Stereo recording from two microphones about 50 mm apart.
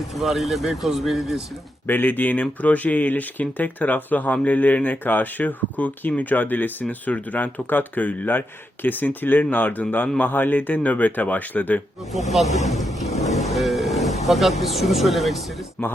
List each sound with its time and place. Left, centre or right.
0.1 s speech: centre
1.9 s speech: left
12.3 s vehicle: centre
15.8 s speech: left